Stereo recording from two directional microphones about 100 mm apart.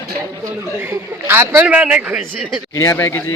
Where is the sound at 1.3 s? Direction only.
20° right (ahead or behind).